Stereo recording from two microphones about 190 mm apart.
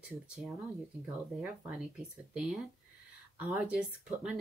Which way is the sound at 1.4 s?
5° right (ahead or behind).